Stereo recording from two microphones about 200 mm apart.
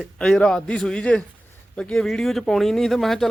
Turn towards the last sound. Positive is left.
turn(degrees=0)  # may be behind; listen again after turning